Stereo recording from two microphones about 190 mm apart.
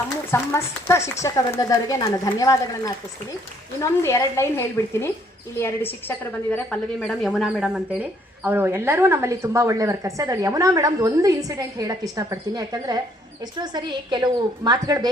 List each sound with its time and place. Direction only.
0.3 s a woman's voice: 15° left (ahead or behind); by 15.1 s 20° right (ahead or behind)